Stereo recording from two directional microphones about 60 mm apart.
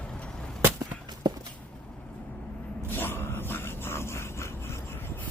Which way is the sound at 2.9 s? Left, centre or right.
Left.